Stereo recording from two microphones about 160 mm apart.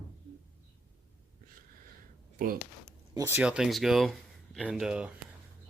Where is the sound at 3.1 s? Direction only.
15° right (ahead or behind).